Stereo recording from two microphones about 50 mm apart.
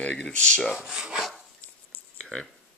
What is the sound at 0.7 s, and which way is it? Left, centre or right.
Speech, centre.